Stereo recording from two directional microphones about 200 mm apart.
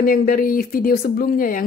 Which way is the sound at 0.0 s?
50° left (ahead or behind).